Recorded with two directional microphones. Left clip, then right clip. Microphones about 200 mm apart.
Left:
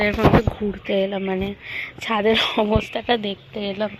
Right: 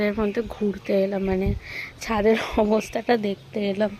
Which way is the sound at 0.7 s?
10° right (ahead or behind).